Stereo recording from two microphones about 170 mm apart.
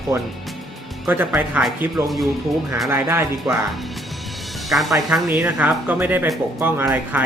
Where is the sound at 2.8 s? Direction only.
15° right (ahead or behind).